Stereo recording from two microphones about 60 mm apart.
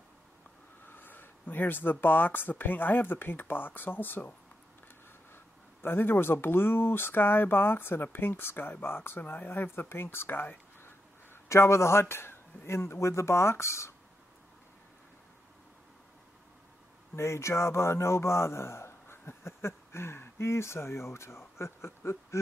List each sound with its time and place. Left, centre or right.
0.8 s speech: left
5.3 s speech: left
11.4 s a man's voice: left
17.1 s speech: left